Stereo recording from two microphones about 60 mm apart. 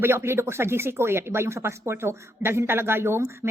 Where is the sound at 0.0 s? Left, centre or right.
Right.